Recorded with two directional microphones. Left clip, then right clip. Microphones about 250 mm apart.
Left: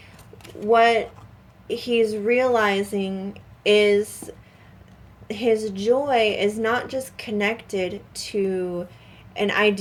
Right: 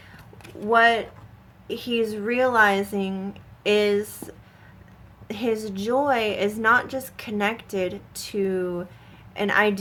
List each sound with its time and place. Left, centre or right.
0.7 s a woman's voice: centre
5.3 s a woman's voice: centre